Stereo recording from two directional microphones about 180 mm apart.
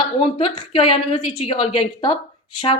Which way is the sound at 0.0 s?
30° left (ahead or behind).